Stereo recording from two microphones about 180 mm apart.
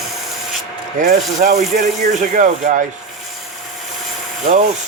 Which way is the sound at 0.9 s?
50° right (ahead or behind).